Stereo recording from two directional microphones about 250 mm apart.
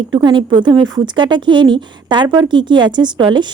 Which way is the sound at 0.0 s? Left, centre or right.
Centre.